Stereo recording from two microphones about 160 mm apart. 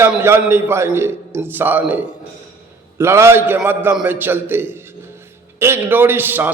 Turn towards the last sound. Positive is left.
turn(degrees=-10)  # may be behind; listen again after turning